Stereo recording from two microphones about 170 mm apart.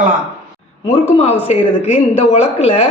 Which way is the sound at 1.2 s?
40° left (ahead or behind).